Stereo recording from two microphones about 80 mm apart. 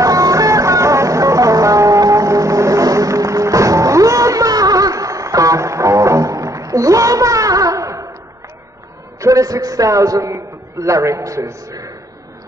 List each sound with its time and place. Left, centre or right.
0.0 s music: right
9.2 s a man's voice: right